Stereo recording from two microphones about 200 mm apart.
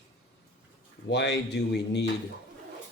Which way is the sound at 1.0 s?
60° left (ahead or behind).